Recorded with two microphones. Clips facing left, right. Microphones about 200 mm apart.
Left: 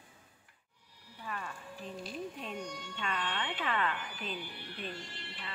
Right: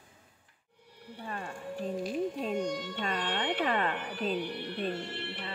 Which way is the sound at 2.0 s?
45° right (ahead or behind).